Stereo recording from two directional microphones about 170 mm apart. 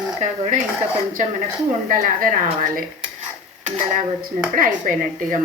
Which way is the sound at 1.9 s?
50° right (ahead or behind).